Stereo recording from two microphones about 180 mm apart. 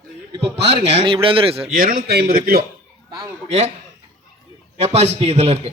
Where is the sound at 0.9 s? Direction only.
30° right (ahead or behind).